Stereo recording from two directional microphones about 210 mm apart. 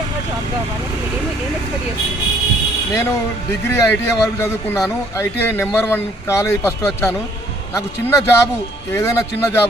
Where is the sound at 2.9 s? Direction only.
15° left (ahead or behind).